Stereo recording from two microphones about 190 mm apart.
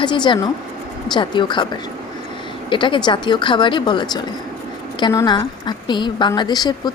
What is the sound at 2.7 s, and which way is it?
A woman's voice, 25° left (ahead or behind).